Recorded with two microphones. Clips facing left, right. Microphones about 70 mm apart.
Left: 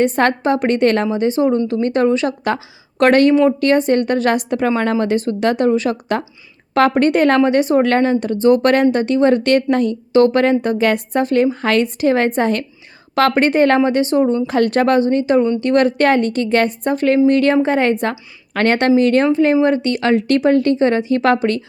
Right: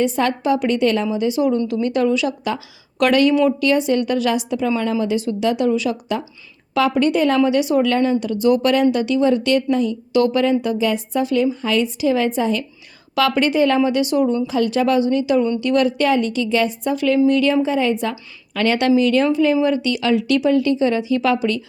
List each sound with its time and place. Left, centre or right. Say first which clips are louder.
0.0 s a woman's voice: left 4 dB; left
14.4 s a woman's voice: left 3 dB; left